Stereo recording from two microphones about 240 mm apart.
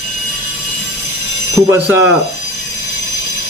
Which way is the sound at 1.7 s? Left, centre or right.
Centre.